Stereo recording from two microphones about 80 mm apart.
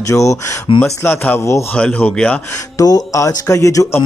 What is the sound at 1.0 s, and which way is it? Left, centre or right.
Speech, left.